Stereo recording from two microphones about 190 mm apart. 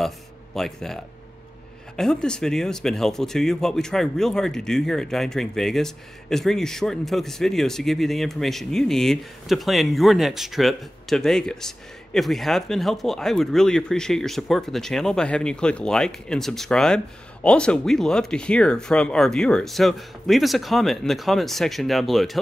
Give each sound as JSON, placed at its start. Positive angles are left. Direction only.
{"t": 0.6, "sound": "speech", "side_deg": 0}